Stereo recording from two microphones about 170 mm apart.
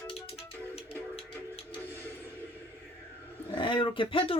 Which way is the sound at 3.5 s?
30° left (ahead or behind).